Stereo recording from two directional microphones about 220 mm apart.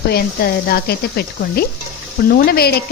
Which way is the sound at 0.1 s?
45° left (ahead or behind).